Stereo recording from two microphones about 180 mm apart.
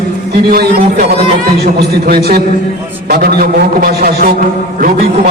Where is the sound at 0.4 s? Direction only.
55° right (ahead or behind).